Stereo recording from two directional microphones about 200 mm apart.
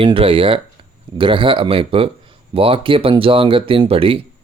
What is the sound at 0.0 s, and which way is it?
A man's voice, 25° right (ahead or behind).